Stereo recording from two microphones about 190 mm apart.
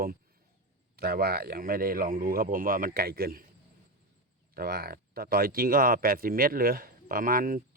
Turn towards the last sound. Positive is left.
turn(degrees=-45)  # may be behind; listen again after turning